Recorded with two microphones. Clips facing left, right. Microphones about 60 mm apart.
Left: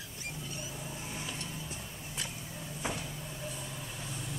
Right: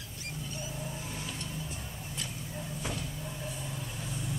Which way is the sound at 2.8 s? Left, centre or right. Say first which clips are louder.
Left 2 dB; centre.